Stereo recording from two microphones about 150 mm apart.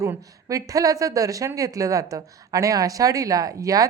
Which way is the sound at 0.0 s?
20° right (ahead or behind).